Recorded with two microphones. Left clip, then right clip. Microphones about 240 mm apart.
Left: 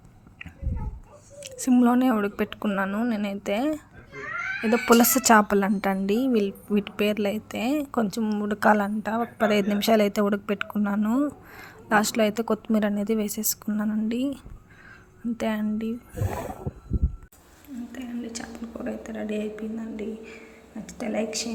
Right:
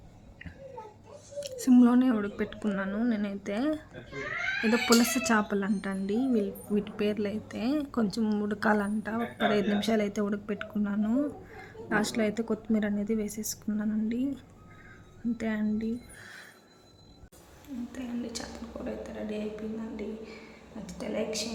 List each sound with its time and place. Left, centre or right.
1.4 s a woman's voice: centre
15.4 s a woman's voice: centre
17.9 s a sound: centre
18.9 s a woman's voice: centre